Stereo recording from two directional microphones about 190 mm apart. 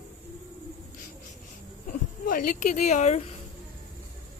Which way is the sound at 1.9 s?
50° left (ahead or behind).